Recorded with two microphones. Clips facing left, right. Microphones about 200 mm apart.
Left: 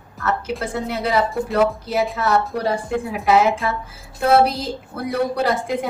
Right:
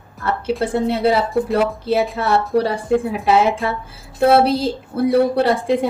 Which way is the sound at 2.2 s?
30° right (ahead or behind).